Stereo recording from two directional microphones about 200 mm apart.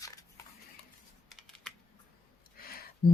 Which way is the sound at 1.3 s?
Centre (ahead or behind).